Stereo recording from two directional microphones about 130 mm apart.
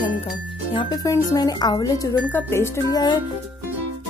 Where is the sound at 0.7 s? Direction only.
35° left (ahead or behind).